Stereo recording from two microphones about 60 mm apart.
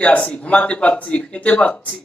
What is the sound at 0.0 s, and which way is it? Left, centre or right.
A man's voice, left.